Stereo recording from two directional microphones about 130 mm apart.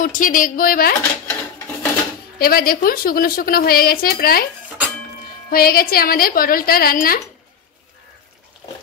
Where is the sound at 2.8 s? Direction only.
90° left.